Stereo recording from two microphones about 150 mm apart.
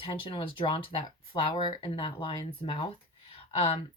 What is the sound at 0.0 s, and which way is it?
Speech, 35° left (ahead or behind).